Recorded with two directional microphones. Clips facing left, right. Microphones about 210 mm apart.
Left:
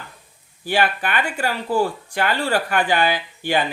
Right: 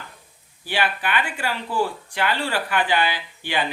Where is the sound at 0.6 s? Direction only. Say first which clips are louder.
Left 4 dB; 45° left (ahead or behind).